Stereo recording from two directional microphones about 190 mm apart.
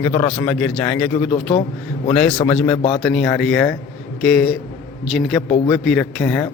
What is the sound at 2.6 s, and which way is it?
A man's voice, 5° left (ahead or behind).